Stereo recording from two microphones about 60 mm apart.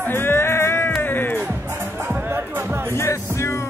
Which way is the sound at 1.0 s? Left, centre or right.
Left.